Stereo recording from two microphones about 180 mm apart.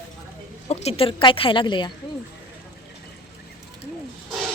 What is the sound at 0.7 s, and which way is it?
A woman's voice, 35° left (ahead or behind).